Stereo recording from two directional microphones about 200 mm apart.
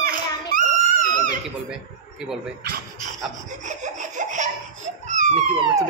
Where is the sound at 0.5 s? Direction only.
40° right (ahead or behind).